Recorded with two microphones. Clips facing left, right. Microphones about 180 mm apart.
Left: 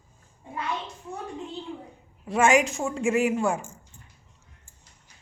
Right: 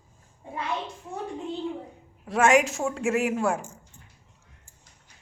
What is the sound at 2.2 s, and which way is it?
Speech, centre (ahead or behind).